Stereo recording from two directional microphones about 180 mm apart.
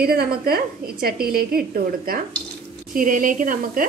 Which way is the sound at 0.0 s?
60° right (ahead or behind).